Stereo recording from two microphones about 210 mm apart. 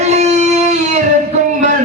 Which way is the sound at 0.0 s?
30° right (ahead or behind).